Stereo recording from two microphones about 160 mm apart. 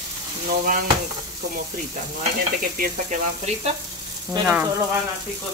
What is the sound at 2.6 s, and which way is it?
Speech, 60° right (ahead or behind).